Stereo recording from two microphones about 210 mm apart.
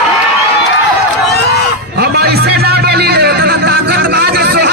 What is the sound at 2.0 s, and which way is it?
Music, 50° right (ahead or behind).